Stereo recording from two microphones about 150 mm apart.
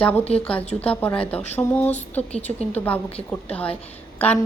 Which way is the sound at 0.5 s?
10° left (ahead or behind).